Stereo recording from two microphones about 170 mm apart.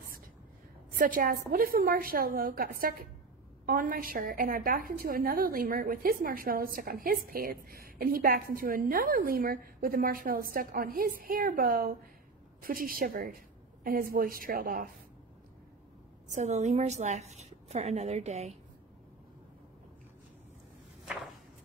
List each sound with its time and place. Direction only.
0.9 s a woman's voice: 55° right (ahead or behind)
16.3 s a woman's voice: 40° right (ahead or behind)